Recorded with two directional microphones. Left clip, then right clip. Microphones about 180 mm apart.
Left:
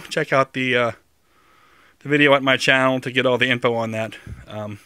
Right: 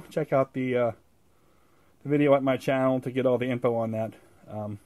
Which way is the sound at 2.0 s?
15° left (ahead or behind).